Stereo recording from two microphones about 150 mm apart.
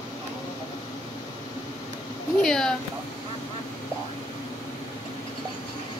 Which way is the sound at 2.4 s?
5° left (ahead or behind).